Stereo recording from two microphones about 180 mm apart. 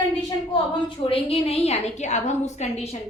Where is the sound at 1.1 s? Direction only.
30° left (ahead or behind).